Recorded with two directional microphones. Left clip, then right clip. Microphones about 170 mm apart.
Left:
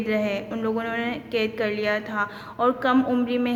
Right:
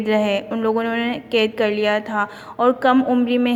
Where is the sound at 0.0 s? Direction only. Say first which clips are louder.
Right 6 dB; 35° right (ahead or behind).